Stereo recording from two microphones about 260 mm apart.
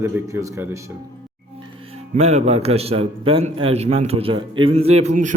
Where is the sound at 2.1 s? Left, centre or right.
Right.